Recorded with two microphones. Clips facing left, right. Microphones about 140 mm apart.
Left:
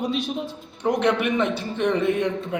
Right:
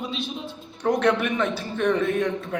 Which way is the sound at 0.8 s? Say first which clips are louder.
Even; 15° left (ahead or behind).